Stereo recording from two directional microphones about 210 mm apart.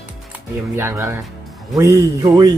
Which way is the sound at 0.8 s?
10° right (ahead or behind).